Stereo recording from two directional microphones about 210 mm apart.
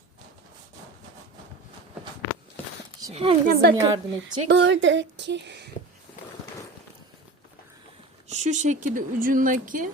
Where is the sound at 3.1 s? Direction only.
25° right (ahead or behind).